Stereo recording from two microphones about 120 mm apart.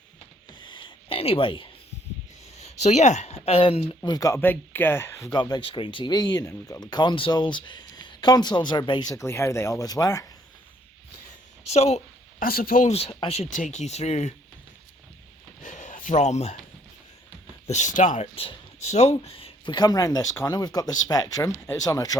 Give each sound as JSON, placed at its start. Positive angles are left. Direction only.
{"t": 0.6, "sound": "a sound", "side_deg": 40}
{"t": 2.6, "sound": "speech", "side_deg": 65}
{"t": 4.0, "sound": "speech", "side_deg": 30}
{"t": 4.4, "sound": "speech", "side_deg": 15}
{"t": 5.3, "sound": "speech", "side_deg": 40}
{"t": 9.1, "sound": "speech", "side_deg": 20}
{"t": 11.6, "sound": "speech", "side_deg": 60}
{"t": 12.7, "sound": "speech", "side_deg": 90}
{"t": 13.2, "sound": "speech", "side_deg": 60}
{"t": 15.6, "sound": "speech", "side_deg": 90}
{"t": 17.7, "sound": "speech", "side_deg": 85}
{"t": 18.3, "sound": "speech", "side_deg": 60}